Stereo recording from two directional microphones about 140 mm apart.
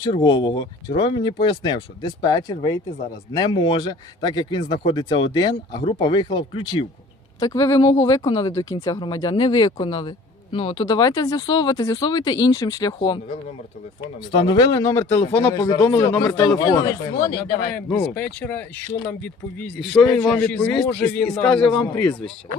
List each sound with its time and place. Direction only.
0.0 s speech: 30° left (ahead or behind)
14.3 s speech: 35° left (ahead or behind); by 15.4 s 15° left (ahead or behind)
15.5 s speech: 30° left (ahead or behind)
17.7 s a man's voice: 10° left (ahead or behind)